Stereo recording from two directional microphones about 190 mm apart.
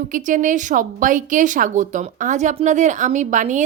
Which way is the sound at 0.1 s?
45° right (ahead or behind).